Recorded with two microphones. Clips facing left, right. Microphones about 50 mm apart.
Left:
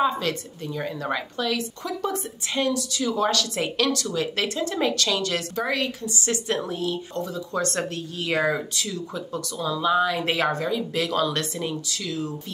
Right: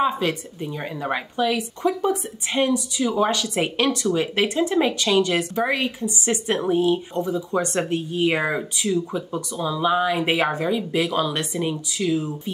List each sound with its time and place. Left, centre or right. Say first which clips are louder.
0.0 s speech: right 2 dB; centre